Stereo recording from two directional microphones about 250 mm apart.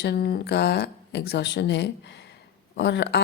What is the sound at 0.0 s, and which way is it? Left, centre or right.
Speech, left.